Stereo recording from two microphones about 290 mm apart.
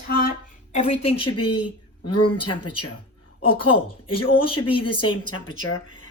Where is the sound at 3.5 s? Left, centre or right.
Centre.